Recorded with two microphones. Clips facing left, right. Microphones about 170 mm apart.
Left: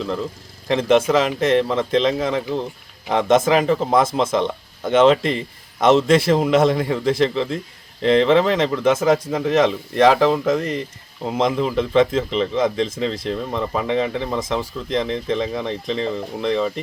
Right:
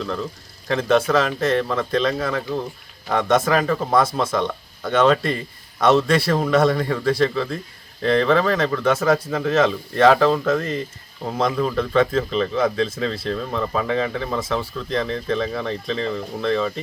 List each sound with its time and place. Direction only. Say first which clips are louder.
0.0 s speech: left 2 dB; 15° left (ahead or behind)